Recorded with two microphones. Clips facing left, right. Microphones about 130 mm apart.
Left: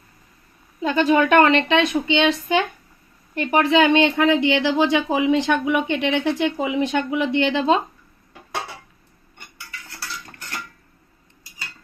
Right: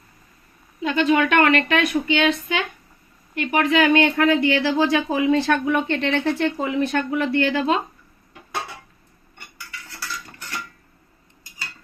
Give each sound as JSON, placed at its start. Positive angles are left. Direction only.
{"t": 0.8, "sound": "a woman's voice", "side_deg": 35}